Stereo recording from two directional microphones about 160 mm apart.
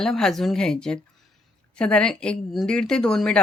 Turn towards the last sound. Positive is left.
turn(degrees=5)  # may be behind; listen again after turning